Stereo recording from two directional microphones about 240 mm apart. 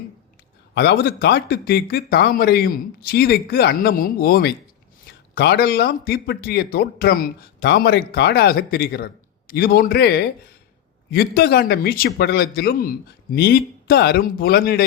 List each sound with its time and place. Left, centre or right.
0.7 s speech: left